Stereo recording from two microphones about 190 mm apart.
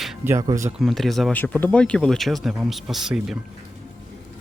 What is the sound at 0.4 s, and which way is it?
Speech, 15° right (ahead or behind).